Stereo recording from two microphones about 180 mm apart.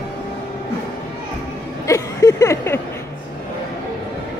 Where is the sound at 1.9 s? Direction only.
15° left (ahead or behind).